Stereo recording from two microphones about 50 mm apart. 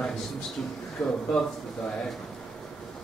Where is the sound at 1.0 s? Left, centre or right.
Centre.